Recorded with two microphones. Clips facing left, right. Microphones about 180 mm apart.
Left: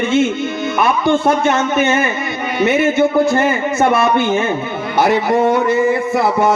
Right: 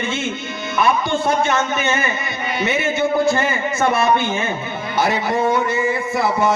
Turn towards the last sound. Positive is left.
turn(degrees=55)  # may be behind; listen again after turning